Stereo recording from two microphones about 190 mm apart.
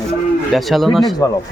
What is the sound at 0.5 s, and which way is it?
Speech, centre (ahead or behind).